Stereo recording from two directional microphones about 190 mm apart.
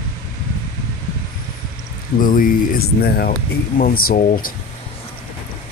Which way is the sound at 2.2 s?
45° left (ahead or behind).